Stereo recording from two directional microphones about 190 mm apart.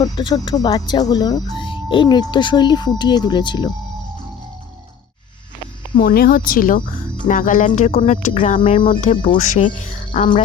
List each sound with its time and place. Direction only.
0.0 s speech: 20° left (ahead or behind)
6.0 s speech: 50° left (ahead or behind)